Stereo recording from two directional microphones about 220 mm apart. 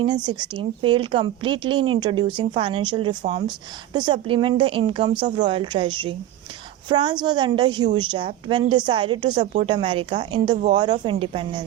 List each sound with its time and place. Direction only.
0.0 s a woman's voice: 20° right (ahead or behind)